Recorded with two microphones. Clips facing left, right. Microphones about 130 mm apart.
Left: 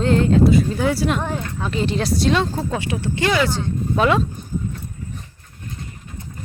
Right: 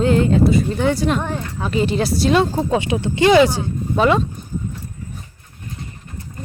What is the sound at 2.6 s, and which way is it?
Speech, 20° right (ahead or behind).